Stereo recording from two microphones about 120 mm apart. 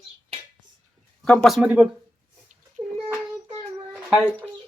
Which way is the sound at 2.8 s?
50° right (ahead or behind).